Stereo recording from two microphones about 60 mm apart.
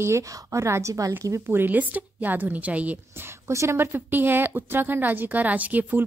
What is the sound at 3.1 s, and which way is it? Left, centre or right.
A woman's voice, right.